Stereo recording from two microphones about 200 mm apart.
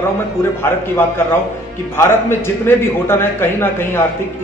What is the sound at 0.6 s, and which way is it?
A man's voice, 10° left (ahead or behind).